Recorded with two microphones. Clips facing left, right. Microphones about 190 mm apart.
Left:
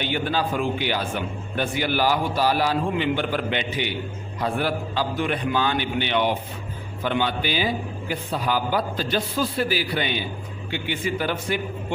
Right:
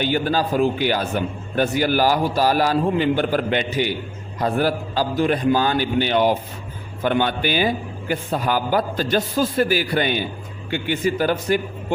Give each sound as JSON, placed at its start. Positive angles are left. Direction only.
{"t": 0.0, "sound": "a man's voice", "side_deg": -40}
{"t": 7.0, "sound": "a man's voice", "side_deg": -50}